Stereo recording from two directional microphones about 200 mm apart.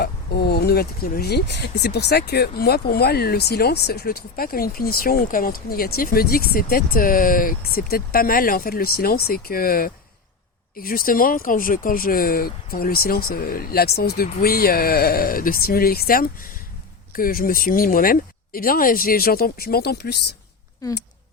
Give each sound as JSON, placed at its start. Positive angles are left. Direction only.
{"t": 0.0, "sound": "speech", "side_deg": 55}